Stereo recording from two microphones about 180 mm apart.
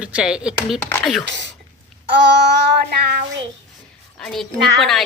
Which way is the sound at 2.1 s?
75° right (ahead or behind).